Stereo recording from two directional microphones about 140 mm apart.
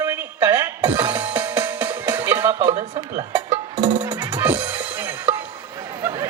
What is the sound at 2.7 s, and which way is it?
Music, 50° right (ahead or behind).